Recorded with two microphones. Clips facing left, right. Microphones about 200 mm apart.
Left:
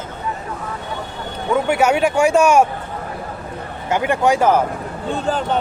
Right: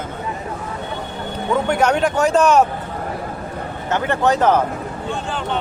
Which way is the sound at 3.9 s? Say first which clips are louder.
Left 1 dB; 10° left (ahead or behind).